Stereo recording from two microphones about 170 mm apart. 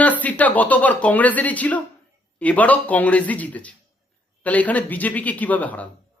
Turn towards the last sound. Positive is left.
turn(degrees=10)  # may be behind; listen again after turning